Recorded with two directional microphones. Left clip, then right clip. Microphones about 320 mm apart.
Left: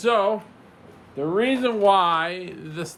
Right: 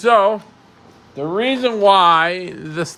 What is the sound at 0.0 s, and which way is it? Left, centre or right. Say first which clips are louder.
Speech: right 7 dB; right.